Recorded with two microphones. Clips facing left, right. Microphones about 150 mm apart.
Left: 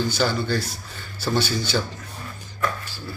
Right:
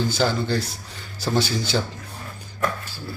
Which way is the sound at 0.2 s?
25° right (ahead or behind).